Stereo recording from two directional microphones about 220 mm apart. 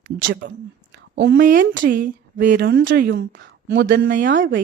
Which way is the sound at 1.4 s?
40° right (ahead or behind).